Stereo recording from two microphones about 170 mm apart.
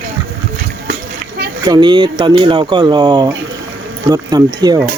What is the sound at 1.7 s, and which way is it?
Speech, 25° right (ahead or behind).